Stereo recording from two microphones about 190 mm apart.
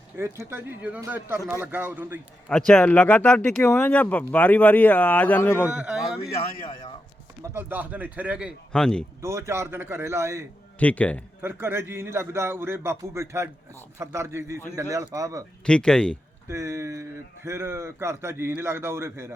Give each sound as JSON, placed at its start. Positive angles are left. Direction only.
{"t": 0.2, "sound": "speech", "side_deg": -10}
{"t": 2.5, "sound": "speech", "side_deg": 5}
{"t": 5.6, "sound": "speech", "side_deg": -5}
{"t": 6.6, "sound": "a man's voice", "side_deg": 20}
{"t": 7.4, "sound": "speech", "side_deg": -10}
{"t": 9.2, "sound": "speech", "side_deg": -15}
{"t": 10.8, "sound": "speech", "side_deg": 10}
{"t": 11.4, "sound": "speech", "side_deg": -10}
{"t": 15.6, "sound": "speech", "side_deg": 5}
{"t": 16.5, "sound": "speech", "side_deg": -15}